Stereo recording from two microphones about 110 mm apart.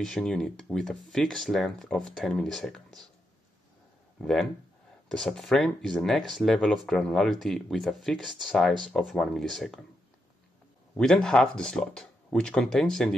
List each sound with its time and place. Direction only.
0.0 s speech: 5° left (ahead or behind)
4.2 s speech: 5° left (ahead or behind)
11.0 s speech: 5° left (ahead or behind)